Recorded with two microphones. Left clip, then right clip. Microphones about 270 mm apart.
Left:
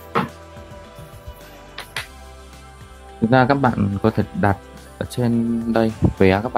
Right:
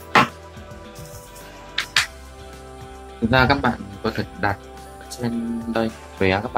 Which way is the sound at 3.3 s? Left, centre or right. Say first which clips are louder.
Left 2 dB; left.